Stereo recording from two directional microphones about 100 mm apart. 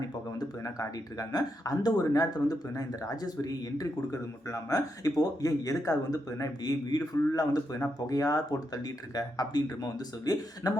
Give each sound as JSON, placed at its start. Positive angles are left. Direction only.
{"t": 0.3, "sound": "speech", "side_deg": 35}